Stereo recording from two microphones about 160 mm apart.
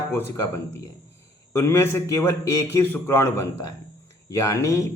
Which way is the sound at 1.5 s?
15° left (ahead or behind).